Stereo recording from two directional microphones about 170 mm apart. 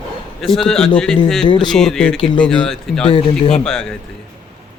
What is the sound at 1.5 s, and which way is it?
Speech, 25° left (ahead or behind).